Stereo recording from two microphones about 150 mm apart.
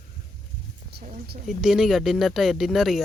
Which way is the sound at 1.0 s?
90° right.